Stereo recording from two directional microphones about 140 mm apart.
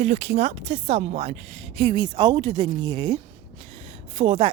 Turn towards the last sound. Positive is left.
turn(degrees=-40)  # may be behind; listen again after turning